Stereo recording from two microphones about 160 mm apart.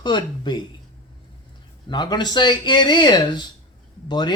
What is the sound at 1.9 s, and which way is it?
Speech, 30° left (ahead or behind).